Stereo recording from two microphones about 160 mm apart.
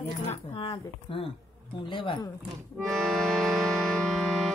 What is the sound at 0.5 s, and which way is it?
Speech, 35° left (ahead or behind).